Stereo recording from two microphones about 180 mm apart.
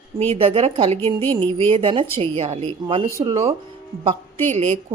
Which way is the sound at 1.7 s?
30° right (ahead or behind).